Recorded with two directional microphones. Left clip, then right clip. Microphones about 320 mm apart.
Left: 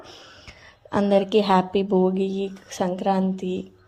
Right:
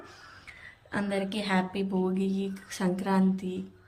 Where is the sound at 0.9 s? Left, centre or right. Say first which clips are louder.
Left 12 dB; centre.